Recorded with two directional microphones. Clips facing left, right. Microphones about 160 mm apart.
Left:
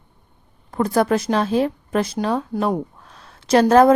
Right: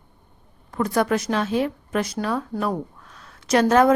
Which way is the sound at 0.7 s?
35° left (ahead or behind).